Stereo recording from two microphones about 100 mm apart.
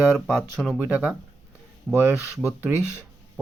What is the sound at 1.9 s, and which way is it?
Speech, 15° right (ahead or behind).